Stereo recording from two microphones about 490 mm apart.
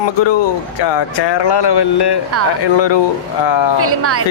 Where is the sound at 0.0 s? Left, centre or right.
Left.